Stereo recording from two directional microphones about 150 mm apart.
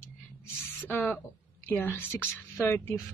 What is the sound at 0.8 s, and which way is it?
Speech, 15° left (ahead or behind).